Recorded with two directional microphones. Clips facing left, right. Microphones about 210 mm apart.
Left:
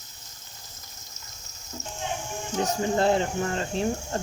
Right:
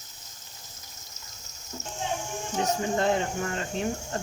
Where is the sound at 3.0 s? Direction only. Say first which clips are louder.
Left 5 dB; 35° left (ahead or behind).